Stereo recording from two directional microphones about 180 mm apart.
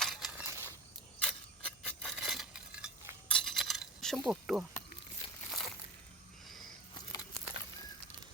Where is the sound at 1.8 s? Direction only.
5° left (ahead or behind).